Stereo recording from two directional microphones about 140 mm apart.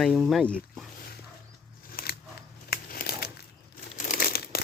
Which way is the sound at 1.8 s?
90° left.